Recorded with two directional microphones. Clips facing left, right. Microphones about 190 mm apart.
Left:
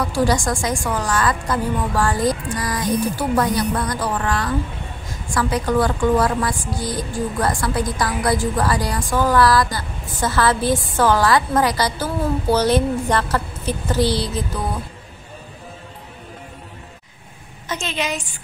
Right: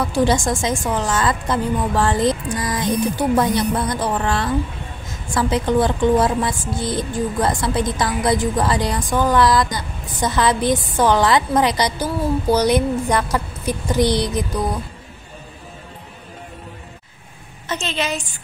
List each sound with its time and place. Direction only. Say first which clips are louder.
0.0 s a woman's voice: right 1 dB; 25° right (ahead or behind)
17.6 s a woman's voice: right 1 dB; 10° left (ahead or behind)